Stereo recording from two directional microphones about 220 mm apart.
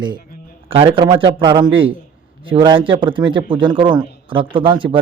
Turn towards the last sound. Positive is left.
turn(degrees=-20)  # may be behind; listen again after turning